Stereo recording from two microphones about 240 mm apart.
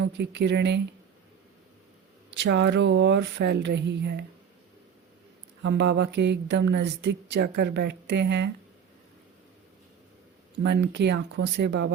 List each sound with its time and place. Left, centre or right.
0.0 s speech: right
2.3 s speech: right
5.6 s speech: right
10.6 s speech: right